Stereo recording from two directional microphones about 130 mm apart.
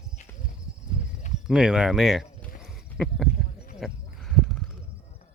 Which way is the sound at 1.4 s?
5° right (ahead or behind).